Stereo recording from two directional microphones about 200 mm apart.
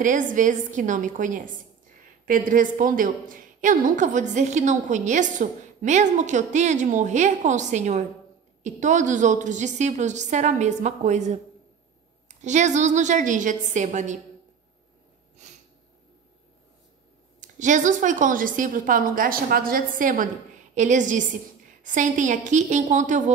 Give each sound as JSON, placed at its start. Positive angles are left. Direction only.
{"t": 0.0, "sound": "a woman's voice", "side_deg": -40}
{"t": 17.4, "sound": "a woman's voice", "side_deg": -40}